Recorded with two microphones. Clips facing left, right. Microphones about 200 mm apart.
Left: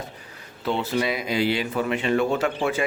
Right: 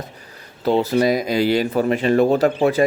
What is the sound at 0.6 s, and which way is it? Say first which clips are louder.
Speech: right 8 dB; 40° right (ahead or behind).